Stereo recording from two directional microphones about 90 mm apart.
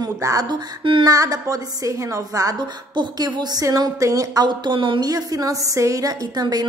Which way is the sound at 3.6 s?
40° right (ahead or behind).